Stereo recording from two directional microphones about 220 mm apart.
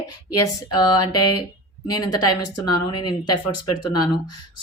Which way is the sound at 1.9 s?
15° left (ahead or behind).